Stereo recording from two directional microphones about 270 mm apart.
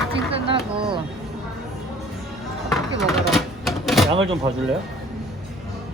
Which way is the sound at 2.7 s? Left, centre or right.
Centre.